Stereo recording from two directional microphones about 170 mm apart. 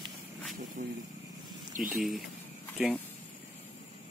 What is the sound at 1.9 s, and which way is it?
Speech, centre (ahead or behind).